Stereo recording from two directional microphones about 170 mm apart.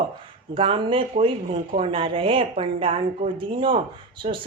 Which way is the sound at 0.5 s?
30° right (ahead or behind).